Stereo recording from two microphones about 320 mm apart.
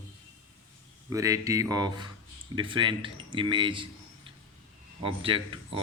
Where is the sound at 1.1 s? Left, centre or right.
Centre.